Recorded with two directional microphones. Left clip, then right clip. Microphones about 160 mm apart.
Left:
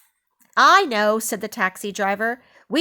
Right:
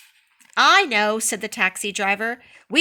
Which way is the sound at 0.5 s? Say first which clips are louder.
Left 1 dB; 50° left (ahead or behind).